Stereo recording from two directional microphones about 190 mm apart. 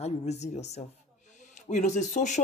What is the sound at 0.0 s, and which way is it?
Speech, 35° left (ahead or behind).